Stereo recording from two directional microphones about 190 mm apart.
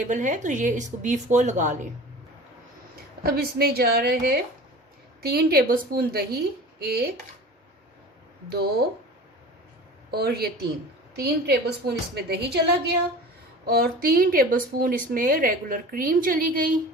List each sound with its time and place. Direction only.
0.0 s speech: 40° right (ahead or behind)
3.2 s a woman's voice: 55° right (ahead or behind)
10.1 s a woman's voice: 55° right (ahead or behind)